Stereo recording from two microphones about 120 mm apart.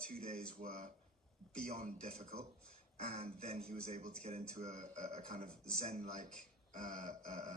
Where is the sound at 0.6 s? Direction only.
90° right.